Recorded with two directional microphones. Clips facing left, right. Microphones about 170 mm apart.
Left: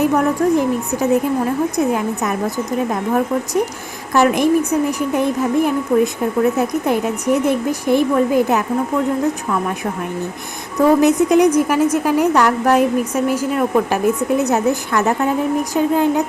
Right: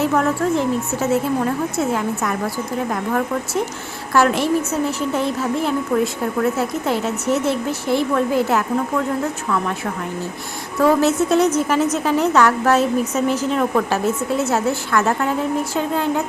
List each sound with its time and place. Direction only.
0.0 s a woman's voice: 15° left (ahead or behind)
10.8 s a woman's voice: 15° left (ahead or behind)